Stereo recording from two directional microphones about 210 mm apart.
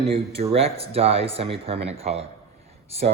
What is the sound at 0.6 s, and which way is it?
Speech, 30° right (ahead or behind).